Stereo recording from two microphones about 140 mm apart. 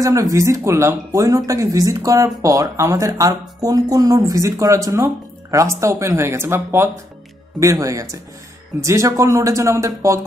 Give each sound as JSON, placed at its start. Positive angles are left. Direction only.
{"t": 0.0, "sound": "speech", "side_deg": -25}